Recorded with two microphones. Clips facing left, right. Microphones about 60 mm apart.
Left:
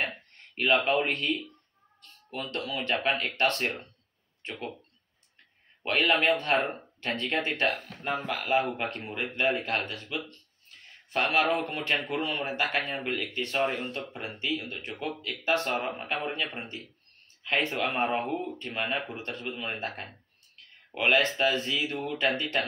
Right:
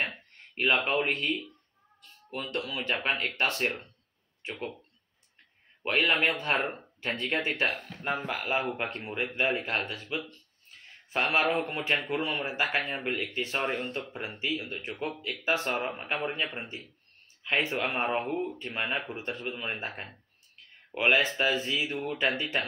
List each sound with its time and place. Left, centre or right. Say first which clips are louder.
0.0 s a sound: left 1 dB; centre
0.8 s speech: left 2 dB; centre
2.0 s cat: even; centre
2.5 s speech: left 1 dB; centre
5.9 s speech: left 2 dB; centre
6.6 s speech: left 1 dB; centre
7.0 s speech: left 1 dB; centre
8.5 s speech: left 4 dB; centre
11.2 s speech: left 1 dB; centre
14.1 s speech: left 1 dB; centre